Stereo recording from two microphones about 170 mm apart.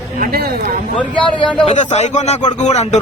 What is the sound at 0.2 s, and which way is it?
Speech, 65° right (ahead or behind).